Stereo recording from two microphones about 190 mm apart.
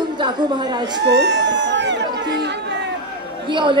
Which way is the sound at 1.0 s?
65° right (ahead or behind).